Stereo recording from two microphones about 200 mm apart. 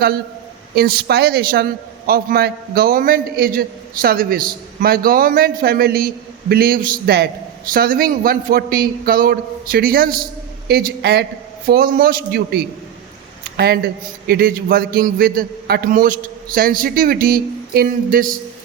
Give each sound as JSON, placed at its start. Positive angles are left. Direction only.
{"t": 0.8, "sound": "a man's voice", "side_deg": -50}